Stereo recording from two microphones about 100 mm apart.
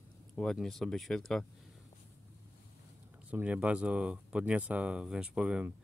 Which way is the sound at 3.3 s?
15° right (ahead or behind).